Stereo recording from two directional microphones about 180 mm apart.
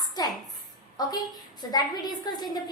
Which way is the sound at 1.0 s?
20° left (ahead or behind).